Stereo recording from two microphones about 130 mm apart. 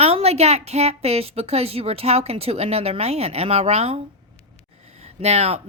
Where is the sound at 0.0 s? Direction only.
50° right (ahead or behind).